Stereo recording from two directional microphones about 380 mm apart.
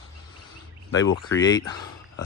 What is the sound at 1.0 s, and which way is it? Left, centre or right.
Speech, centre.